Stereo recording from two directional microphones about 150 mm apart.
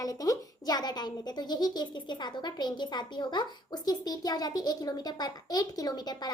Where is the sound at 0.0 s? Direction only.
25° left (ahead or behind).